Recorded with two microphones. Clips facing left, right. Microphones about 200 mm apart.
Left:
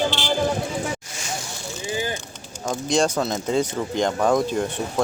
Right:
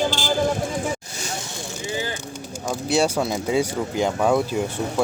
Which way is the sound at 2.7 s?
5° right (ahead or behind).